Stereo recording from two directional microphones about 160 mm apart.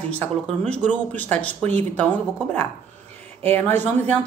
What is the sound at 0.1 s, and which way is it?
Speech, 5° left (ahead or behind).